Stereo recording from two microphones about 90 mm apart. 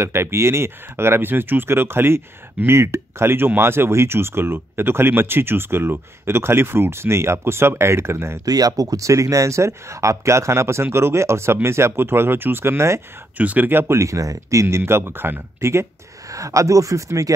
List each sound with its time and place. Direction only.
0.0 s speech: 30° right (ahead or behind)
8.5 s speech: 45° right (ahead or behind)
13.4 s speech: 20° right (ahead or behind); by 17.3 s 35° right (ahead or behind)